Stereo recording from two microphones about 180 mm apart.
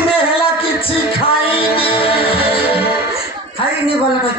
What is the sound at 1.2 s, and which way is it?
Music, 30° left (ahead or behind).